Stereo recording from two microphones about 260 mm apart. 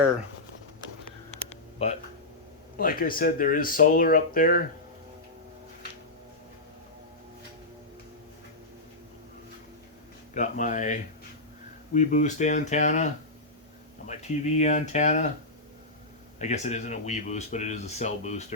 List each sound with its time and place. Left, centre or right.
1.3 s a sound: left
2.7 s speech: left
10.3 s speech: left
14.1 s speech: left
16.4 s speech: left